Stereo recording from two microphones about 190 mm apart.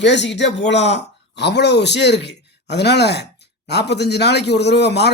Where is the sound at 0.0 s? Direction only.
65° left (ahead or behind).